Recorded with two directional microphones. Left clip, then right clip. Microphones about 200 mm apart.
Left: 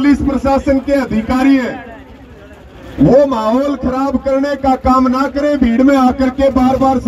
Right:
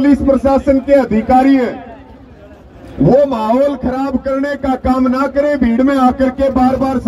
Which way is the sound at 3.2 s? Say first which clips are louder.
Right 1 dB; 40° left (ahead or behind).